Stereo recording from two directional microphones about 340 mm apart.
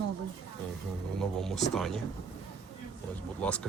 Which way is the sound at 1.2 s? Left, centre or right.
Centre.